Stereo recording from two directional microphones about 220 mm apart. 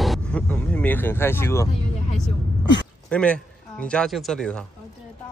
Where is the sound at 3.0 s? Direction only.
5° left (ahead or behind).